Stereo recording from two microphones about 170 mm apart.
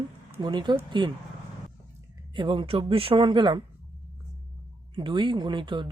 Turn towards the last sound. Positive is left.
turn(degrees=-30)  # may be behind; listen again after turning